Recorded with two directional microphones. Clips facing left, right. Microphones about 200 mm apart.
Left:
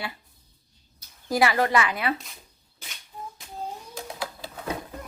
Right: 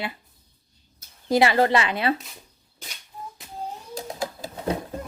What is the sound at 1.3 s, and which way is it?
Speech, 25° right (ahead or behind).